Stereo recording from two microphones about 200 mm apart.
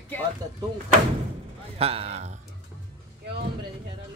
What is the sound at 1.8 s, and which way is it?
Speech, 30° right (ahead or behind).